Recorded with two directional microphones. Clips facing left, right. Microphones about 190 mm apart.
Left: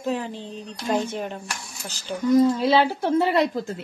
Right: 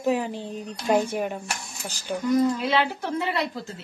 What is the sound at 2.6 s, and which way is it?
A woman's voice, 30° left (ahead or behind).